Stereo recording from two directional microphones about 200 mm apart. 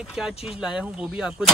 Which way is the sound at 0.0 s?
5° right (ahead or behind).